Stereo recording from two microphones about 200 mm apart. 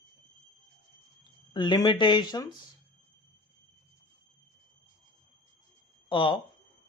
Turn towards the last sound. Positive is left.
turn(degrees=25)  # may be behind; listen again after turning